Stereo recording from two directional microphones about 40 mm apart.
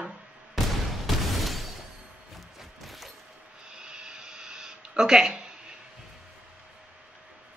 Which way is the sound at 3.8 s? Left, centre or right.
Centre.